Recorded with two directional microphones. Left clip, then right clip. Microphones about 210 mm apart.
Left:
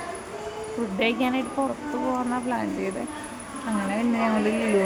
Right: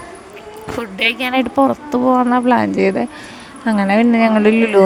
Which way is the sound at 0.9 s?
55° right (ahead or behind).